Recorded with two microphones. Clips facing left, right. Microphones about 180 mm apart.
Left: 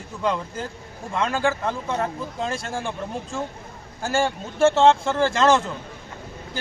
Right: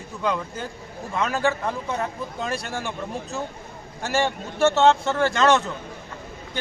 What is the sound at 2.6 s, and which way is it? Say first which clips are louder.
Speech: left 1 dB; 30° left (ahead or behind).